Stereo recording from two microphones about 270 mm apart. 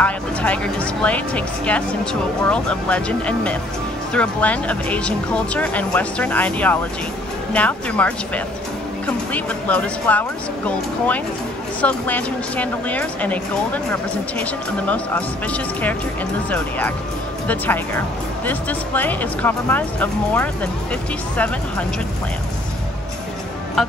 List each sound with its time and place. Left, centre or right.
0.0 s speech: centre
14.4 s speech: centre
23.8 s music: centre